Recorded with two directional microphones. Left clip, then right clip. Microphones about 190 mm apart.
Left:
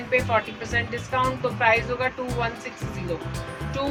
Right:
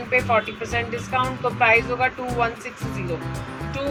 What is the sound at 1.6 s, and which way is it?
Speech, 20° left (ahead or behind).